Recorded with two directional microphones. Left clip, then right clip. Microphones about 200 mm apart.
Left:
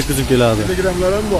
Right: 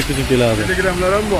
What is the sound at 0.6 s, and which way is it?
Speech, 30° left (ahead or behind).